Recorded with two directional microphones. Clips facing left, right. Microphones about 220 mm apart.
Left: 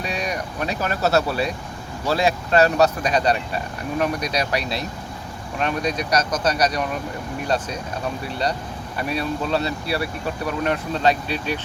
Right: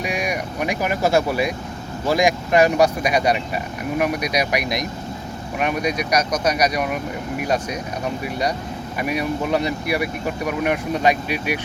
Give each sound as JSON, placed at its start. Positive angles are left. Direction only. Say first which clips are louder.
{"t": 0.0, "sound": "speech", "louder": "right 2 dB", "side_deg": -10}